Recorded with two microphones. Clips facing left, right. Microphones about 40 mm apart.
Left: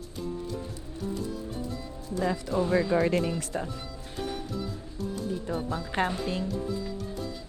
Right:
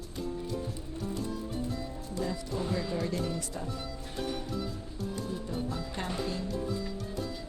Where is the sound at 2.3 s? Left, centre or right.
Left.